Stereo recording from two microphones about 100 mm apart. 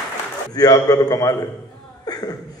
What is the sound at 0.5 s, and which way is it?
Speech, 40° left (ahead or behind).